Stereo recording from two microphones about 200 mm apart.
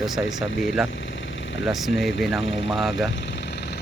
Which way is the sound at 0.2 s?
Centre (ahead or behind).